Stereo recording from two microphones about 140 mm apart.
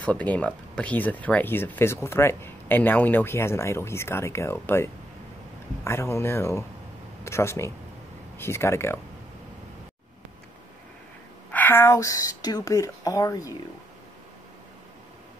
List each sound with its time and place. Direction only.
0.0 s speech: 10° left (ahead or behind)
11.5 s speech: 15° left (ahead or behind)